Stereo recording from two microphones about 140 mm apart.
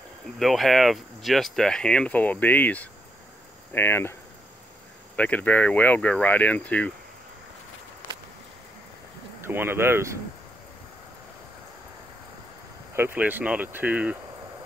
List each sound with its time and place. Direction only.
0.4 s speech: centre (ahead or behind)
9.4 s speech: 15° right (ahead or behind)
12.9 s speech: 15° right (ahead or behind)